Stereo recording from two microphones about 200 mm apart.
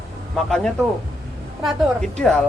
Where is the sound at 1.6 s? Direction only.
Centre (ahead or behind).